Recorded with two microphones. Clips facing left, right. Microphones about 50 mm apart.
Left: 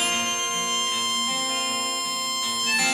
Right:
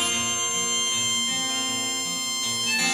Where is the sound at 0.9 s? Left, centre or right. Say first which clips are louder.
Left 2 dB; centre.